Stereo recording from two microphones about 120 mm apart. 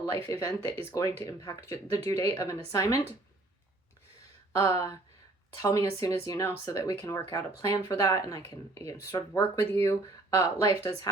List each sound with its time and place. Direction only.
0.3 s speech: 25° left (ahead or behind)
4.5 s speech: 25° left (ahead or behind)